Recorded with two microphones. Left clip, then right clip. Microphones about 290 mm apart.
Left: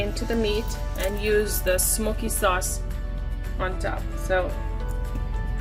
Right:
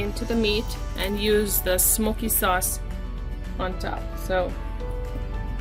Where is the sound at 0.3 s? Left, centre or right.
Centre.